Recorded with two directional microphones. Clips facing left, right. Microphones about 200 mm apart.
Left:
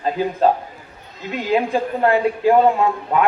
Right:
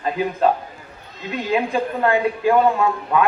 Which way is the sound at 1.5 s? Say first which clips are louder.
Left 2 dB; 35° left (ahead or behind).